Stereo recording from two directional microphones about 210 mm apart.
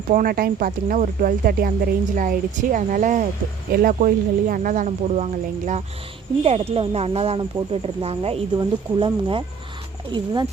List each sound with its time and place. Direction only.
0.1 s speech: 40° right (ahead or behind); by 9.4 s 25° right (ahead or behind)